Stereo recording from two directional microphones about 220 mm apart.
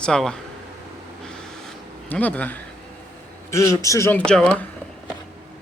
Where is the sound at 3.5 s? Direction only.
15° left (ahead or behind).